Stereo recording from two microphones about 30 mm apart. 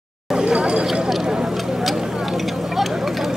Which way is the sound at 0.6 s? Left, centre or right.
Right.